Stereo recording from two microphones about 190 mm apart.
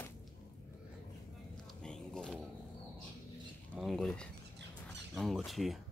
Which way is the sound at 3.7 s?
Centre (ahead or behind).